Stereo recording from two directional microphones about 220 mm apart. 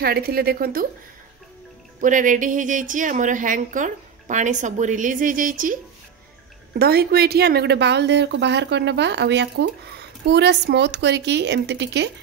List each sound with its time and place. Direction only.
0.0 s a woman's voice: 45° right (ahead or behind)
2.0 s speech: 35° right (ahead or behind)
6.8 s a woman's voice: 45° right (ahead or behind)